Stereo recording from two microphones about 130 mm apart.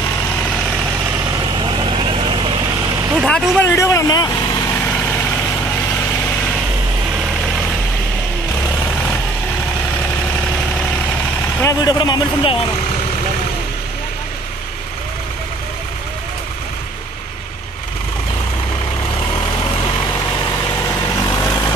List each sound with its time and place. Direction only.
1.7 s vehicle: 40° right (ahead or behind)
3.3 s speech: 5° left (ahead or behind)
3.6 s speech: 20° left (ahead or behind)
11.6 s speech: 30° left (ahead or behind)
21.0 s vehicle: 25° left (ahead or behind)